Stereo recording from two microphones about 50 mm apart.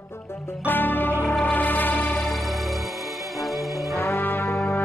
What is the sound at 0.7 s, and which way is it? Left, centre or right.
Music, left.